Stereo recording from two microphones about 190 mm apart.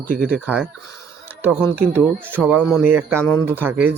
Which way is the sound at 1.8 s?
10° right (ahead or behind).